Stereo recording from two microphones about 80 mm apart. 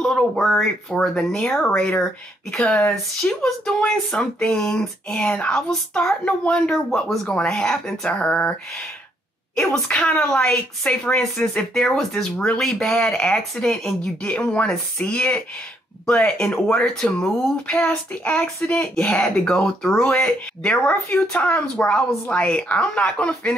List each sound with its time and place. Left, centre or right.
0.0 s speech: centre
9.8 s speech: centre